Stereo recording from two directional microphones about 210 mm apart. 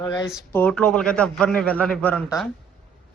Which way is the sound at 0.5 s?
5° left (ahead or behind).